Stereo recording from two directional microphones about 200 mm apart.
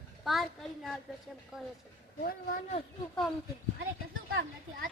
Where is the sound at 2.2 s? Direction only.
40° left (ahead or behind).